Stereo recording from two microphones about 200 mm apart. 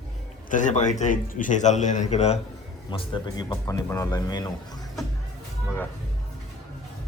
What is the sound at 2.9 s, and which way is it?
Speech, 25° left (ahead or behind).